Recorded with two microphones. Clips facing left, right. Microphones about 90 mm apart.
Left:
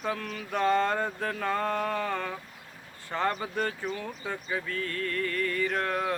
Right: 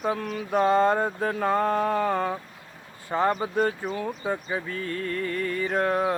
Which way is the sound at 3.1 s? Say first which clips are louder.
Right 5 dB; 15° right (ahead or behind).